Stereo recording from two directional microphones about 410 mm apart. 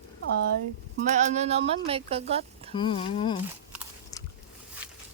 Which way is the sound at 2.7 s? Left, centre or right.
Centre.